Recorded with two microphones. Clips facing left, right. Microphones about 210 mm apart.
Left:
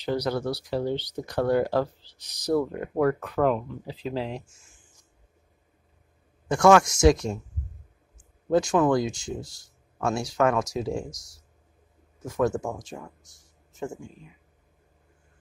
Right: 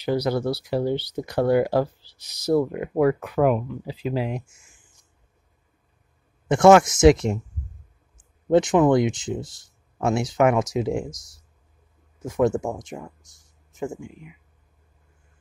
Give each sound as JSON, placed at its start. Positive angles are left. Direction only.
{"t": 0.0, "sound": "speech", "side_deg": -10}
{"t": 6.5, "sound": "speech", "side_deg": -20}
{"t": 8.5, "sound": "speech", "side_deg": -20}
{"t": 12.3, "sound": "speech", "side_deg": -20}